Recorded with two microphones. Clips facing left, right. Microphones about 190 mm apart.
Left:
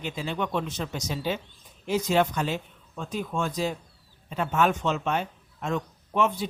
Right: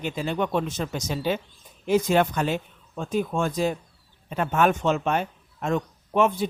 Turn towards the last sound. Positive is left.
turn(degrees=-50)  # may be behind; listen again after turning